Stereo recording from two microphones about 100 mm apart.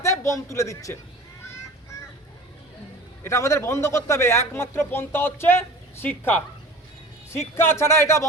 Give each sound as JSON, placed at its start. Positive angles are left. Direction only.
{"t": 0.0, "sound": "a man's voice", "side_deg": 30}
{"t": 3.2, "sound": "a man's voice", "side_deg": 30}